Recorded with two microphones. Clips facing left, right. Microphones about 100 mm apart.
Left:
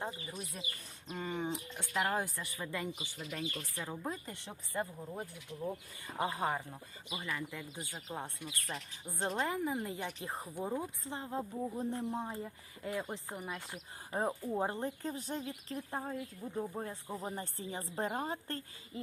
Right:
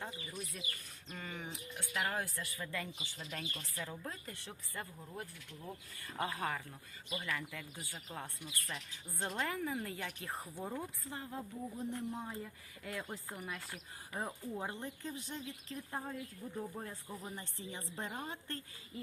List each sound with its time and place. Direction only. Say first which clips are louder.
0.0 s a woman's voice: left 4 dB; 30° left (ahead or behind)
11.0 s a woman's voice: left 5 dB; 25° left (ahead or behind)
15.9 s a woman's voice: left 2 dB; 20° left (ahead or behind)